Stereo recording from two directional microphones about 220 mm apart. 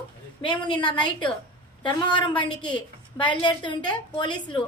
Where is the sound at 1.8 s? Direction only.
20° left (ahead or behind).